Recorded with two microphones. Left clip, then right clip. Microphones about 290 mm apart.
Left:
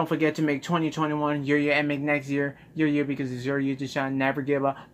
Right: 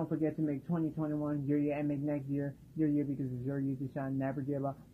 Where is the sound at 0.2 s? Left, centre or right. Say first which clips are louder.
Left 10 dB; left.